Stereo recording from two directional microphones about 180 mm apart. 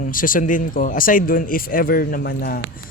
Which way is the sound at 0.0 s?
50° left (ahead or behind).